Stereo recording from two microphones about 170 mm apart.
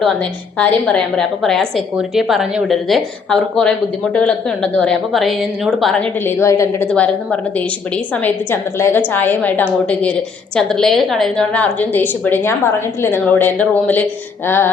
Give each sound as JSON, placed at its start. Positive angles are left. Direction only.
{"t": 0.0, "sound": "a woman's voice", "side_deg": 5}
{"t": 6.2, "sound": "a woman's voice", "side_deg": 15}